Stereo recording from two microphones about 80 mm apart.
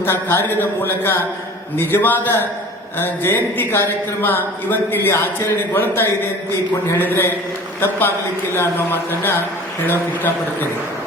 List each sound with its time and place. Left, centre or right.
0.0 s a man's voice: left